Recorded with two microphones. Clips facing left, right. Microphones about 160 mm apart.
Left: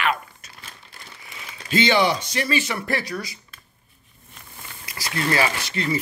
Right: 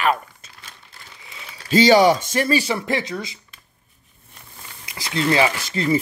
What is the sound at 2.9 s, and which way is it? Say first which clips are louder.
Speech: right 3 dB; 20° right (ahead or behind).